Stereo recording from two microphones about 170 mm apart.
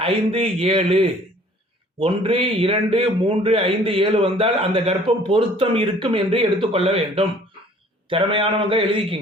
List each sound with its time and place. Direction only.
0.0 s a man's voice: 35° right (ahead or behind)